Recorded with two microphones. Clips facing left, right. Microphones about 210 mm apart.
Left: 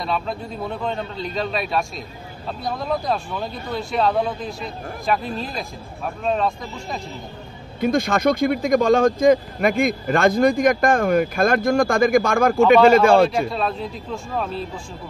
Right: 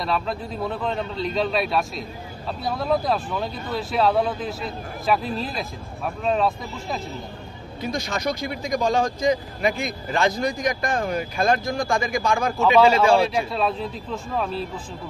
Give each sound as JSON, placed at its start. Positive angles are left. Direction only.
{"t": 0.0, "sound": "a man's voice", "side_deg": 0}
{"t": 7.8, "sound": "speech", "side_deg": 55}
{"t": 13.5, "sound": "a man's voice", "side_deg": 0}